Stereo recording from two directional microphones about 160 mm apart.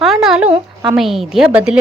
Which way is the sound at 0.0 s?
Centre (ahead or behind).